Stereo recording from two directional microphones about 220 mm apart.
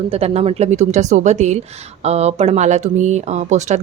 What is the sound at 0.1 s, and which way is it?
A woman's voice, 30° right (ahead or behind).